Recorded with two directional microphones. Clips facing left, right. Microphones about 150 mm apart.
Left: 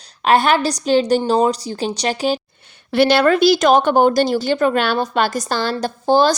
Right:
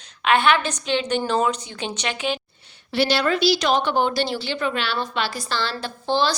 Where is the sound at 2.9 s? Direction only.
55° left (ahead or behind).